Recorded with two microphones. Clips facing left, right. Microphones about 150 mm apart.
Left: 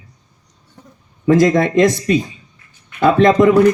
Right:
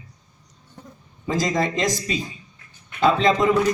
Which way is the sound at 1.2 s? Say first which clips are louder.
Left 10 dB; 60° left (ahead or behind).